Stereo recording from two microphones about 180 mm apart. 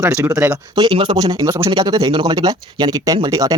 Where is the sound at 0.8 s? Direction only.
25° right (ahead or behind).